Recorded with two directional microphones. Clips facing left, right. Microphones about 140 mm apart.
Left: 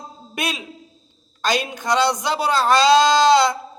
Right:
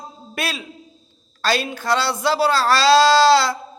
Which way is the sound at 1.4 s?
15° left (ahead or behind).